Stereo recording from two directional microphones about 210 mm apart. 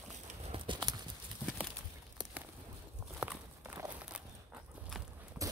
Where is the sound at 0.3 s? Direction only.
25° right (ahead or behind).